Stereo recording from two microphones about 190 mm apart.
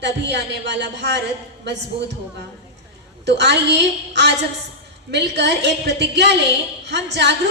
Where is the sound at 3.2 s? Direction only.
65° right (ahead or behind).